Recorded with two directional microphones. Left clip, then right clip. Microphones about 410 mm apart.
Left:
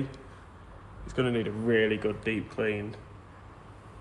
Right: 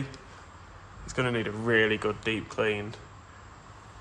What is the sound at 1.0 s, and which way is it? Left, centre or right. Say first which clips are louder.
Speech: even; centre.